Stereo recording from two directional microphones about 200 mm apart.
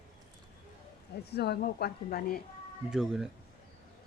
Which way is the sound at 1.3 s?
55° left (ahead or behind).